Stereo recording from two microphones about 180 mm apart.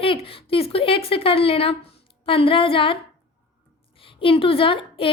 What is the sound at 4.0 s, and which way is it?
A woman's voice, 30° left (ahead or behind).